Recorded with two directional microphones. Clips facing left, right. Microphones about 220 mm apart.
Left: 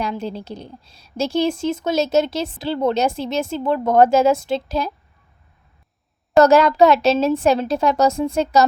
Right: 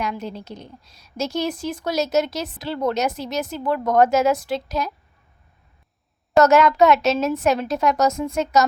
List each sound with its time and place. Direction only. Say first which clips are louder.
0.0 s a woman's voice: left 3 dB; 30° left (ahead or behind)
6.3 s a woman's voice: left 2 dB; 35° left (ahead or behind)